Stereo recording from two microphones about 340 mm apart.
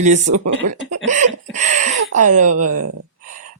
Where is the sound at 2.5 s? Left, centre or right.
Right.